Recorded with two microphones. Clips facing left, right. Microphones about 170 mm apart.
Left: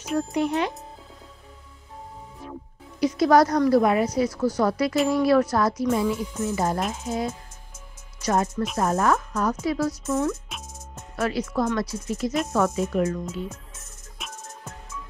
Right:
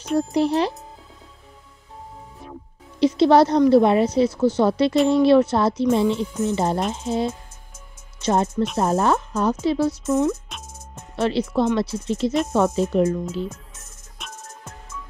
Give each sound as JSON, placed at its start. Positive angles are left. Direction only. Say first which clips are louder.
{"t": 0.3, "sound": "speech", "louder": "right 4 dB", "side_deg": -35}
{"t": 3.0, "sound": "a woman's voice", "louder": "right 3 dB", "side_deg": -30}
{"t": 14.2, "sound": "music", "louder": "even", "side_deg": 0}